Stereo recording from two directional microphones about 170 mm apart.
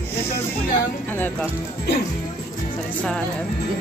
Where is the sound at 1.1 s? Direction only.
10° left (ahead or behind).